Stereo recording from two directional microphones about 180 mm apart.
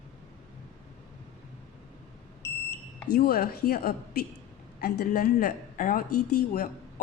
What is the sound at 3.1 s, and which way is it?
A woman's voice, 60° left (ahead or behind).